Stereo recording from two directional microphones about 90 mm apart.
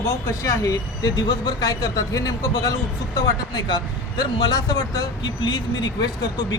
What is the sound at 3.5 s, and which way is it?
A man's voice, 55° left (ahead or behind).